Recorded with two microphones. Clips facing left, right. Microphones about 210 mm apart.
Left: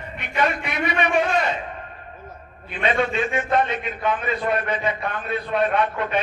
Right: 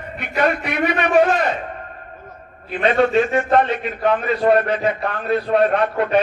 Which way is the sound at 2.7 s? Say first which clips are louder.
Right 6 dB; 40° right (ahead or behind).